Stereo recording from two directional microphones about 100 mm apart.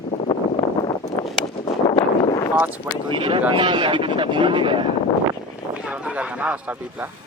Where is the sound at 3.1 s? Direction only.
55° right (ahead or behind).